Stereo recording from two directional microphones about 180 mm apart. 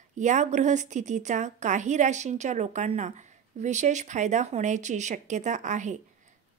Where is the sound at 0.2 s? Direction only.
40° right (ahead or behind).